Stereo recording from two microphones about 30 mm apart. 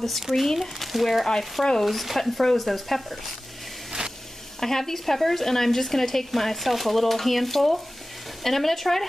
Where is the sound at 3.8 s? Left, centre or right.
Right.